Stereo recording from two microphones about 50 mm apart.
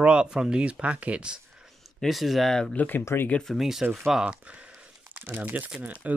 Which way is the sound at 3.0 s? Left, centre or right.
Left.